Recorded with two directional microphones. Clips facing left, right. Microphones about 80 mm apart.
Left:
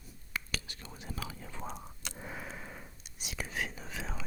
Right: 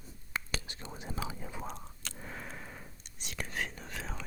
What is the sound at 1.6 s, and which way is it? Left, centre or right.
Whispering, centre.